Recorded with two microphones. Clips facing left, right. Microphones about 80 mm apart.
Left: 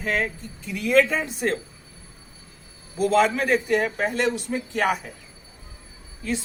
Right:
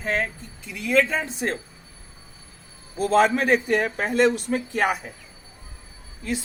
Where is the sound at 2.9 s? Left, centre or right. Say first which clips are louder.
Right 1 dB; right.